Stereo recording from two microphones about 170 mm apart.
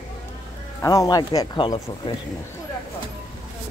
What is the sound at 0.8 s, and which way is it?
Speech, 20° left (ahead or behind).